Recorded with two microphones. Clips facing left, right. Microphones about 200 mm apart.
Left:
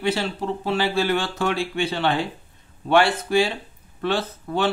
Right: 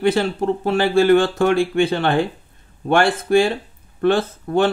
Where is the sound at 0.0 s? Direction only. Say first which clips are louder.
Right 6 dB; 50° right (ahead or behind).